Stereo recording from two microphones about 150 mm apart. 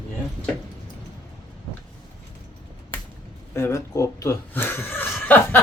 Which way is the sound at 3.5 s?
20° left (ahead or behind).